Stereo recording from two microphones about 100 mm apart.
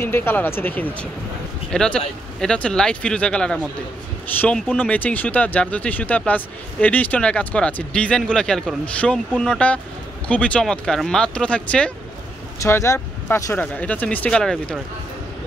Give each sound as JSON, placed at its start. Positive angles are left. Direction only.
{"t": 0.0, "sound": "speech", "side_deg": 20}
{"t": 1.7, "sound": "speech", "side_deg": 5}
{"t": 12.6, "sound": "speech", "side_deg": 25}